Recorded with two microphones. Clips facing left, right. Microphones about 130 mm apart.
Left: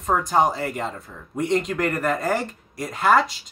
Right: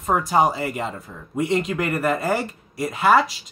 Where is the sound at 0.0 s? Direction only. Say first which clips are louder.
Right 1 dB; 5° right (ahead or behind).